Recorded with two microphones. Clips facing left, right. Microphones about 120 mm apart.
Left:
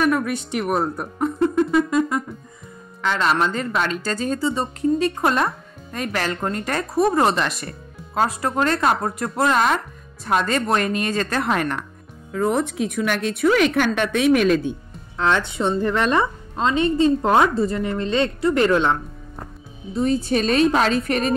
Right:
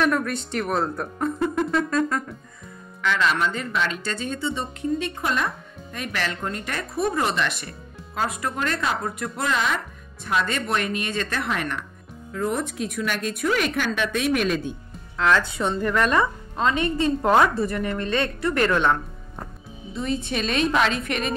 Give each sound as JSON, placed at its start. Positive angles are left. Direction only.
{"t": 0.0, "sound": "speech", "side_deg": 10}
{"t": 1.5, "sound": "music", "side_deg": 0}
{"t": 1.9, "sound": "music", "side_deg": 15}
{"t": 3.0, "sound": "a man's voice", "side_deg": 35}
{"t": 12.3, "sound": "a woman's voice", "side_deg": 60}
{"t": 15.1, "sound": "a woman's voice", "side_deg": 25}
{"t": 19.9, "sound": "speech", "side_deg": 40}